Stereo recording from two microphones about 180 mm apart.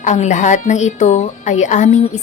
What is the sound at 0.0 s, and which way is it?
A woman's voice, 40° left (ahead or behind).